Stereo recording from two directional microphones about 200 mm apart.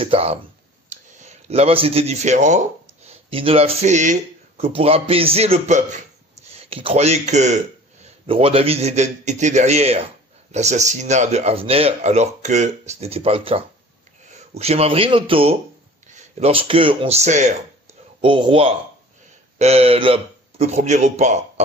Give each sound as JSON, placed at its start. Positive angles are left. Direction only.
{"t": 0.0, "sound": "a man's voice", "side_deg": -30}